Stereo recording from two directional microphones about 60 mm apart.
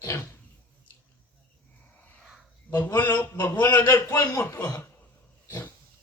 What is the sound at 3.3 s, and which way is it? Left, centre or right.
A man's voice, left.